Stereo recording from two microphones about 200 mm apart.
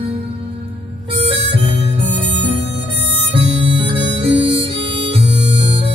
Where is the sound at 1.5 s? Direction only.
25° right (ahead or behind).